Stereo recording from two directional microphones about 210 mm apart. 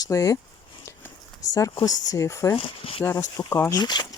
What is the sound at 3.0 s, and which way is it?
Speech, 15° left (ahead or behind).